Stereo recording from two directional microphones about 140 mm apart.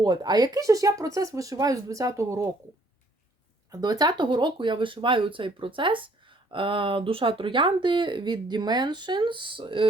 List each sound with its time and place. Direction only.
0.0 s speech: 30° right (ahead or behind)
3.7 s speech: 25° right (ahead or behind)